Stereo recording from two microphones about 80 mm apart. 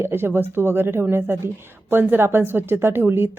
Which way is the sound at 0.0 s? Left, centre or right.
Right.